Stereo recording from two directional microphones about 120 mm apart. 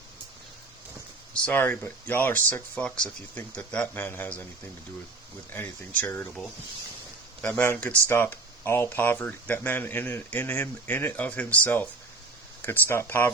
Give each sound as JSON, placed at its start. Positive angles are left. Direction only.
{"t": 1.3, "sound": "speech", "side_deg": 15}
{"t": 5.5, "sound": "speech", "side_deg": 15}
{"t": 7.6, "sound": "speech", "side_deg": 15}